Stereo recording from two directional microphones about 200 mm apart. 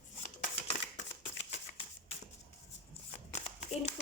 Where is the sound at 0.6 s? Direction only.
30° left (ahead or behind).